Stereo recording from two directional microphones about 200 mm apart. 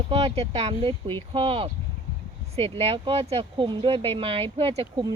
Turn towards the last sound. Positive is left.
turn(degrees=-20)  # may be behind; listen again after turning